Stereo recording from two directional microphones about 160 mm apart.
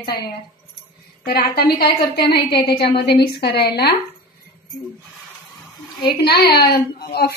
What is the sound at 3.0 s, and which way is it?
Speech, 85° left.